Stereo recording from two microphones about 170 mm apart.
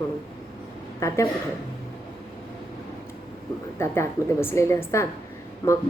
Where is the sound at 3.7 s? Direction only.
15° left (ahead or behind).